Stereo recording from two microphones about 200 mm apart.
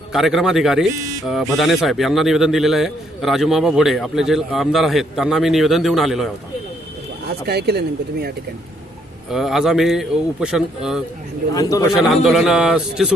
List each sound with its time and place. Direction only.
0.1 s a man's voice: centre (ahead or behind)
7.3 s speech: 55° right (ahead or behind)
9.3 s a man's voice: centre (ahead or behind)
11.5 s a man's voice: 15° left (ahead or behind)
11.9 s a man's voice: centre (ahead or behind)